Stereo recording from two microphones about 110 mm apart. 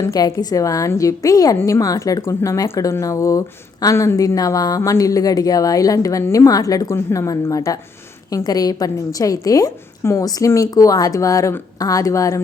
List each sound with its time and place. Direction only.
0.0 s a woman's voice: 35° left (ahead or behind)